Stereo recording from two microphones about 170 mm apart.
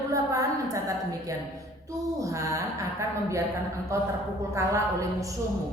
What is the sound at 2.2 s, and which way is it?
A woman's voice, 20° right (ahead or behind).